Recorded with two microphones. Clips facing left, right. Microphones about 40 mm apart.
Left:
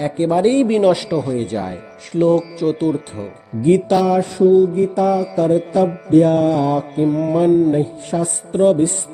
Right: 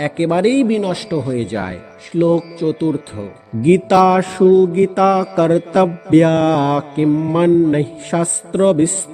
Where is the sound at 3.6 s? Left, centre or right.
Right.